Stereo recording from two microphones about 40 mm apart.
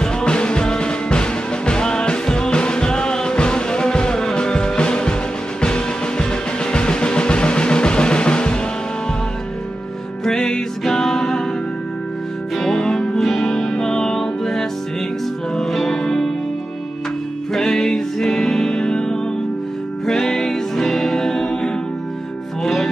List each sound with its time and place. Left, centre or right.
0.0 s music: left
10.2 s music: centre
12.5 s music: centre
13.2 s music: centre
15.9 s music: centre
17.5 s music: centre